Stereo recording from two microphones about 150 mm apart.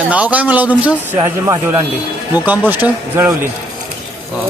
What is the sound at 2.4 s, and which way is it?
Speech, 10° right (ahead or behind).